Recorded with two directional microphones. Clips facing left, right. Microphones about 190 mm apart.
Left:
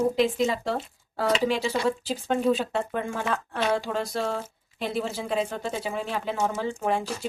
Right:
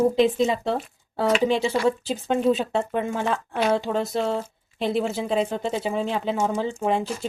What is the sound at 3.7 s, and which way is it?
Speech, 20° right (ahead or behind).